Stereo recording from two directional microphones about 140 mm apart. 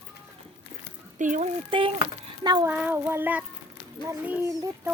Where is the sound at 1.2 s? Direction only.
65° right (ahead or behind).